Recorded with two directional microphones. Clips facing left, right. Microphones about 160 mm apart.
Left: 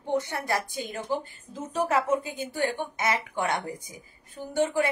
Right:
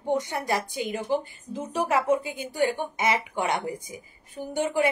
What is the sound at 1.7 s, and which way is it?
A woman's voice, 10° right (ahead or behind).